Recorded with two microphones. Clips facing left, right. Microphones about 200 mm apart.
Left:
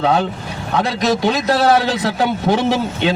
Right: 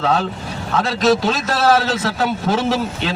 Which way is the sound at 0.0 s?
20° left (ahead or behind).